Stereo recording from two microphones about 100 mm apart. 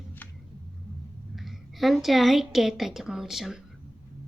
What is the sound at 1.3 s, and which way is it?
A woman's voice, centre (ahead or behind).